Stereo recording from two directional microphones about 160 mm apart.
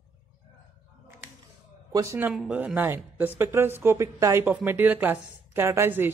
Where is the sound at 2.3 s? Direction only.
5° right (ahead or behind).